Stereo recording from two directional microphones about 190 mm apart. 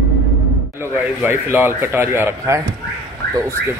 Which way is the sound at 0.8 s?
10° right (ahead or behind).